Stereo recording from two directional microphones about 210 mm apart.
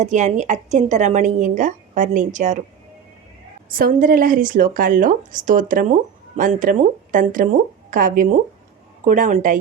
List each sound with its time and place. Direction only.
0.0 s a woman's voice: 35° right (ahead or behind)
3.7 s a woman's voice: 45° right (ahead or behind)